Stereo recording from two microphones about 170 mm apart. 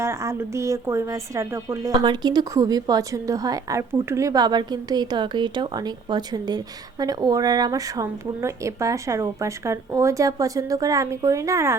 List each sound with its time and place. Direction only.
0.0 s speech: 15° right (ahead or behind)